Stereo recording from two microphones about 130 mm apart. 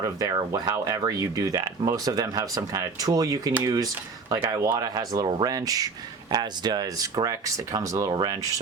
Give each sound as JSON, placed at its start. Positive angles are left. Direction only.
{"t": 0.0, "sound": "speech", "side_deg": -30}